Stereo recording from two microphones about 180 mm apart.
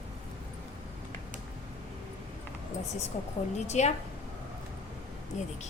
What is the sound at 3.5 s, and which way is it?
Speech, 40° left (ahead or behind).